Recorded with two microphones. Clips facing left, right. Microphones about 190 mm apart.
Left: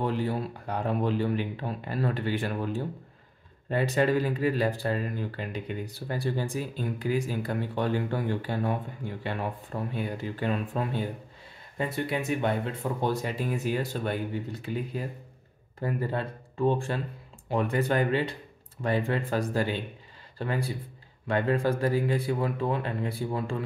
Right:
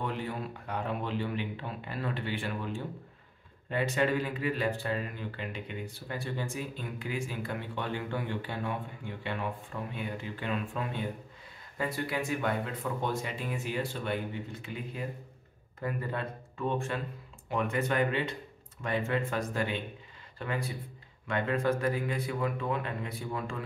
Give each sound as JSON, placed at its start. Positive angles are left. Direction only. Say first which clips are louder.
{"t": 0.0, "sound": "speech", "louder": "left 6 dB", "side_deg": 35}
{"t": 11.8, "sound": "speech", "louder": "left 3 dB", "side_deg": 25}